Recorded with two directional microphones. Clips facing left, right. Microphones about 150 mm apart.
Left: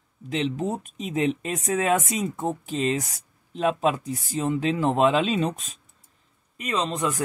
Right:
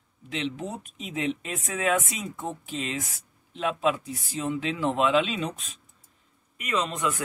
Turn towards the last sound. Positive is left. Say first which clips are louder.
# left 2 dB
turn(degrees=30)  # may be behind; listen again after turning